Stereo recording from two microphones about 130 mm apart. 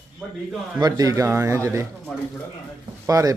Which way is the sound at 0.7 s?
30° right (ahead or behind).